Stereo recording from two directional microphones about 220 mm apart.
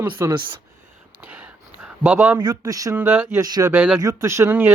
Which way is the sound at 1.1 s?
5° right (ahead or behind).